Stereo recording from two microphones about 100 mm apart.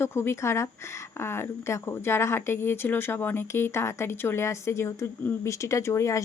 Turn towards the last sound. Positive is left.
turn(degrees=30)  # may be behind; listen again after turning